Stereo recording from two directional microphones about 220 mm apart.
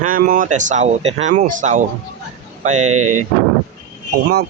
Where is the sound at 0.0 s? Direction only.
40° right (ahead or behind).